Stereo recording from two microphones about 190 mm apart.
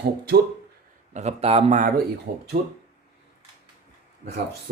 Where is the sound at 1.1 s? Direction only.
35° right (ahead or behind).